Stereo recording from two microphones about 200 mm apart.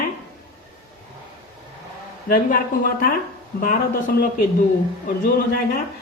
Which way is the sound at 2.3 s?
45° left (ahead or behind).